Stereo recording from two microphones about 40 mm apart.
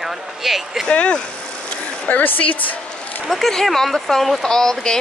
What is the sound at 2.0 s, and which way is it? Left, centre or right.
A woman's voice, left.